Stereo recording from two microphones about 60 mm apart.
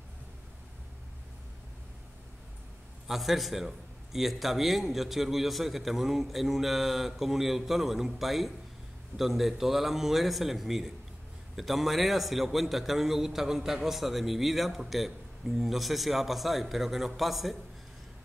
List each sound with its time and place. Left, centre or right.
3.1 s a man's voice: centre